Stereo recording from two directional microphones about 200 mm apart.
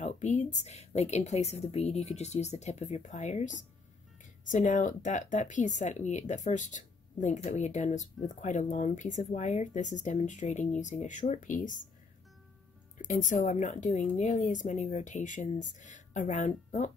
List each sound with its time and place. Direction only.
0.0 s a sound: 35° left (ahead or behind)
0.7 s speech: 35° left (ahead or behind)
13.0 s speech: 40° left (ahead or behind)